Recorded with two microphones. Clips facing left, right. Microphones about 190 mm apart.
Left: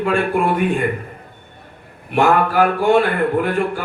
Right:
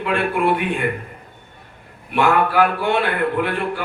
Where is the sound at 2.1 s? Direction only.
45° left (ahead or behind).